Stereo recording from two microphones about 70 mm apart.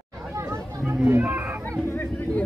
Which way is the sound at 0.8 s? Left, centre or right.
Right.